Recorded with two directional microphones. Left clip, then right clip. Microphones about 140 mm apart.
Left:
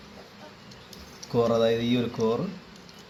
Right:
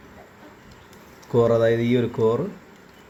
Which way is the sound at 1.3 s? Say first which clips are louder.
Right 5 dB; 90° right.